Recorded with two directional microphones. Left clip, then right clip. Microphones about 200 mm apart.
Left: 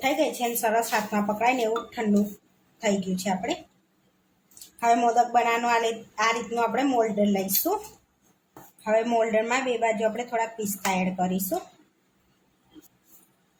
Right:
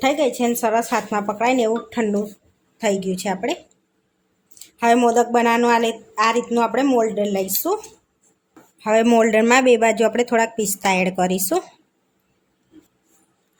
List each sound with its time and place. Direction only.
0.0 s a woman's voice: 55° right (ahead or behind)
4.8 s a woman's voice: 45° right (ahead or behind)
8.8 s a woman's voice: 50° right (ahead or behind)